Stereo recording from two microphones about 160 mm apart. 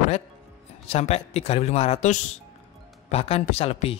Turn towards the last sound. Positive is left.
turn(degrees=40)  # may be behind; listen again after turning